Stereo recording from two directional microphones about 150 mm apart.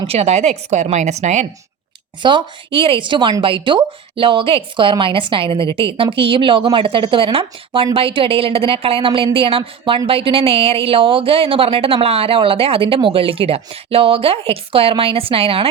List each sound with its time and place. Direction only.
0.1 s a woman's voice: 45° right (ahead or behind)
2.2 s a woman's voice: 35° right (ahead or behind)